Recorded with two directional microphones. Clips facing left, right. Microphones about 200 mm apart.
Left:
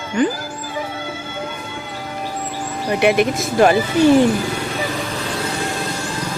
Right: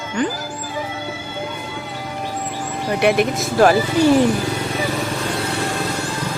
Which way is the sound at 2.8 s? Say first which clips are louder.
Left 1 dB; centre (ahead or behind).